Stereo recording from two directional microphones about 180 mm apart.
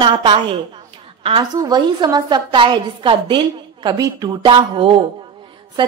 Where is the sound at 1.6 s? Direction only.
25° right (ahead or behind).